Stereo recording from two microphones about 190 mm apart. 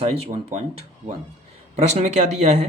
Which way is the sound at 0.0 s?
30° right (ahead or behind).